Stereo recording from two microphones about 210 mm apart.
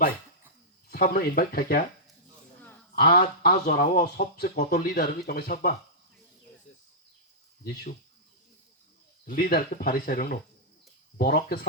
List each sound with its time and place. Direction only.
0.9 s speech: 45° left (ahead or behind)
2.9 s speech: 45° left (ahead or behind)
9.2 s speech: 45° left (ahead or behind)